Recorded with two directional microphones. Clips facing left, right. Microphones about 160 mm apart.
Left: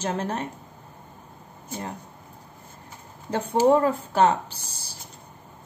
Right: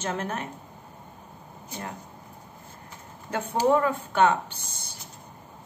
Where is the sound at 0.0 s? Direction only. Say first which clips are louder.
Left 3 dB; 35° left (ahead or behind).